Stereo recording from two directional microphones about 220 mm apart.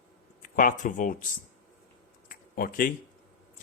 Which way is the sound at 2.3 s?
40° left (ahead or behind).